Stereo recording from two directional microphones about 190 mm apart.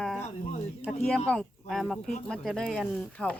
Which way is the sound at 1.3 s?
Centre (ahead or behind).